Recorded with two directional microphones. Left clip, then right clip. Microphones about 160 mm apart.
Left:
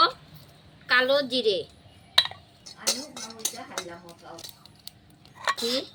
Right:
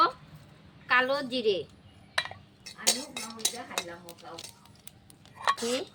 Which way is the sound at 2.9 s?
5° right (ahead or behind).